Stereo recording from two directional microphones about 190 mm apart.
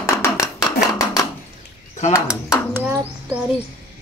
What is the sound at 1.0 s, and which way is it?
Dishes, 20° left (ahead or behind).